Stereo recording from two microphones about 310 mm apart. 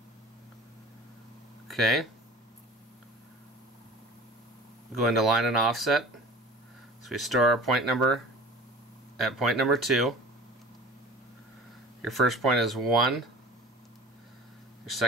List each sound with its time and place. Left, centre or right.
1.7 s speech: centre
5.0 s speech: centre
7.1 s speech: centre
9.2 s speech: centre
12.0 s speech: centre